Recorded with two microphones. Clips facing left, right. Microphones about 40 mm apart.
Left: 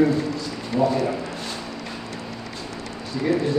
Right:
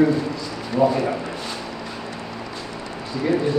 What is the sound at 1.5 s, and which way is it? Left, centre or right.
Vehicle, right.